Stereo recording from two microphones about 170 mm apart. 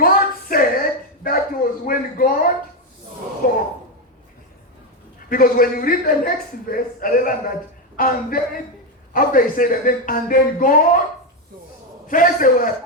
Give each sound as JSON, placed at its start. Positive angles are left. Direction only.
{"t": 0.0, "sound": "a sound", "side_deg": 60}
{"t": 5.3, "sound": "a man's voice", "side_deg": 55}
{"t": 12.0, "sound": "a man's voice", "side_deg": 50}